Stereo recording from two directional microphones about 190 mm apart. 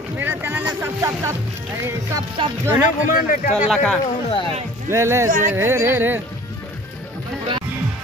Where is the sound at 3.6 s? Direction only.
5° left (ahead or behind).